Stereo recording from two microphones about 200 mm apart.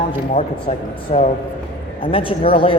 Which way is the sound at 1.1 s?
30° left (ahead or behind).